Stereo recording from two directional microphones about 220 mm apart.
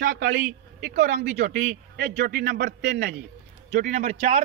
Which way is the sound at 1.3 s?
35° right (ahead or behind).